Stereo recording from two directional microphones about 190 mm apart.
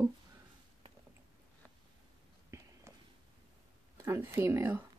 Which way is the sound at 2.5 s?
15° right (ahead or behind).